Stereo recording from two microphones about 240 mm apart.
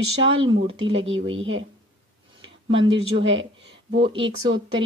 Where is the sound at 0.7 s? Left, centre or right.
Right.